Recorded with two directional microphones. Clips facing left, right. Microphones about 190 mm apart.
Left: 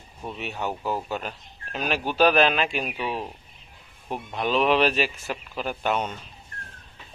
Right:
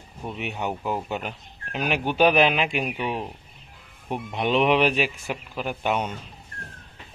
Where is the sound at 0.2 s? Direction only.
10° right (ahead or behind).